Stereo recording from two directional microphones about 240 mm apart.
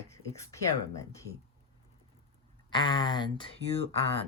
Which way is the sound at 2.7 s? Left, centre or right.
Centre.